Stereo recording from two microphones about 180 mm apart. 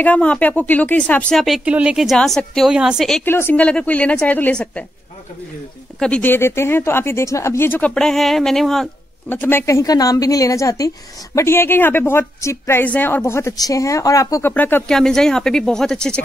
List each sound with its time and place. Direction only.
0.0 s speech: 5° left (ahead or behind)
3.3 s a woman's voice: 10° left (ahead or behind)
5.9 s a woman's voice: 5° left (ahead or behind)